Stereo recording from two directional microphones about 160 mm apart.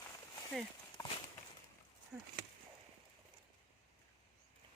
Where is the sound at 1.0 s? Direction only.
20° left (ahead or behind).